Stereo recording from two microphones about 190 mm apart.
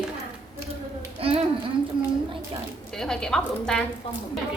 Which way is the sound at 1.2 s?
30° right (ahead or behind).